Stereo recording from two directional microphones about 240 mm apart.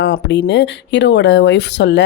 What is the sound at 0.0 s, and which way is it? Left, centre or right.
Speech, left.